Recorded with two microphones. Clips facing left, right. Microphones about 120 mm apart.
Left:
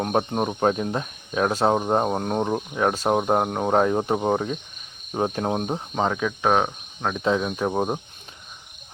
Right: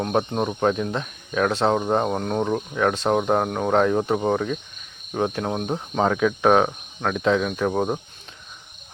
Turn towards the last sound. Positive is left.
turn(degrees=15)  # may be behind; listen again after turning